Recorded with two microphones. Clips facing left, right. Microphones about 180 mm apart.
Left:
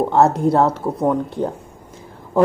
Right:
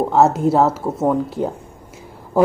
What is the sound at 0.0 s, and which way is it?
Speech, centre (ahead or behind).